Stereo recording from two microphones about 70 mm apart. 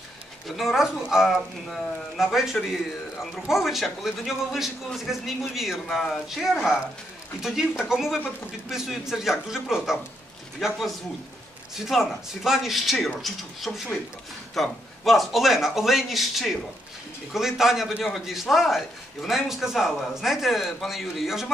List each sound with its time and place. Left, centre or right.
0.6 s a man's voice: centre
7.4 s a man's voice: centre